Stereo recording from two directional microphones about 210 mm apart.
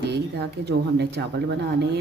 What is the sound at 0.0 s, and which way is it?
Speech, 50° right (ahead or behind).